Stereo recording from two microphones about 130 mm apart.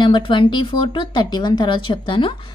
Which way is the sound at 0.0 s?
35° left (ahead or behind).